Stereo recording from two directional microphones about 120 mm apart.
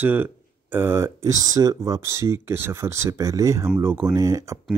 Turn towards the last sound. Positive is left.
turn(degrees=-25)  # may be behind; listen again after turning